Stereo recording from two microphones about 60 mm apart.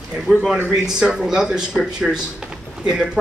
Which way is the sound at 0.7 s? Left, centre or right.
Centre.